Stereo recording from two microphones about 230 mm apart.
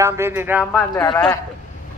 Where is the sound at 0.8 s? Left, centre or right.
Centre.